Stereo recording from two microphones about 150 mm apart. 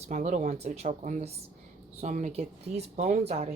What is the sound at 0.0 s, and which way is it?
Speech, 50° right (ahead or behind).